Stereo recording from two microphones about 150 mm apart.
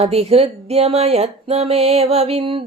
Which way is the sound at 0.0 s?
45° right (ahead or behind).